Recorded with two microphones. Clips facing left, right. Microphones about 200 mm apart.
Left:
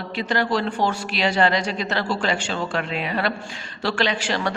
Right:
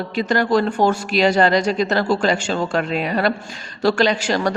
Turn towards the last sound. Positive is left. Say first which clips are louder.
# right 5 dB
turn(degrees=-40)  # may be behind; listen again after turning